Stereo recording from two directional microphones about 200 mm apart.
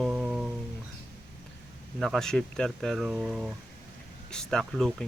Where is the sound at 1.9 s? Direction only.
Centre (ahead or behind).